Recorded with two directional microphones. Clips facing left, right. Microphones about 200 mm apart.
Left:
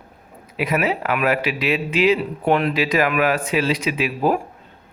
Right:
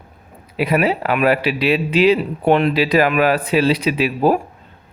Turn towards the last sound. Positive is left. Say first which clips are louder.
# right 4 dB
turn(degrees=-30)  # may be behind; listen again after turning